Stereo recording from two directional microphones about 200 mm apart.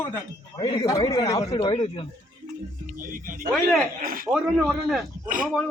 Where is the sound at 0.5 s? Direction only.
20° left (ahead or behind).